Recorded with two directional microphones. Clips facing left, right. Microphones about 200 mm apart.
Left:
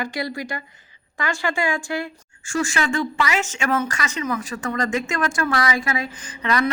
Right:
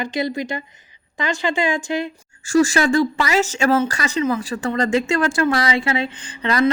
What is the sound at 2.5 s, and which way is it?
Speech, 40° right (ahead or behind).